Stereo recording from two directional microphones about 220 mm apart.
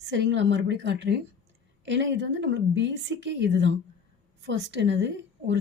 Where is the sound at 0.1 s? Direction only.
55° right (ahead or behind).